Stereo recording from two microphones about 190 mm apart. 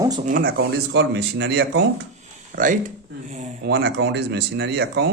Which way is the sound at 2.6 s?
45° right (ahead or behind).